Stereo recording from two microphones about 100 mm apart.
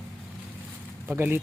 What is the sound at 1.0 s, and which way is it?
Speech, 20° right (ahead or behind).